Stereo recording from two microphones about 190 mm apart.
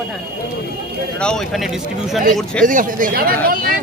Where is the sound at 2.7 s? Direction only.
45° right (ahead or behind).